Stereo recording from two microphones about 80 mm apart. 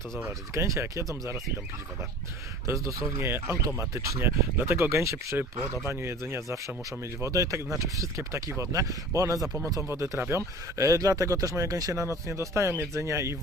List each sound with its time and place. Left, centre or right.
0.5 s speech: right
2.6 s speech: right
9.9 s speech: right